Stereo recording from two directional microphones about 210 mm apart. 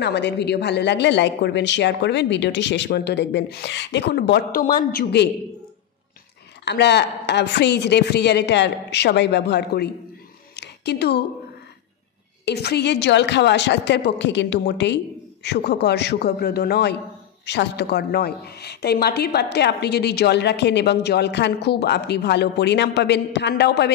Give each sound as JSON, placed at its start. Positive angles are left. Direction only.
{"t": 0.0, "sound": "speech", "side_deg": 55}
{"t": 6.6, "sound": "a woman's voice", "side_deg": 55}
{"t": 10.5, "sound": "a sound", "side_deg": 50}
{"t": 12.4, "sound": "a woman's voice", "side_deg": 50}